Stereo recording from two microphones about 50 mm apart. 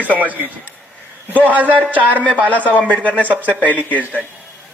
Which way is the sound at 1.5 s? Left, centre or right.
Right.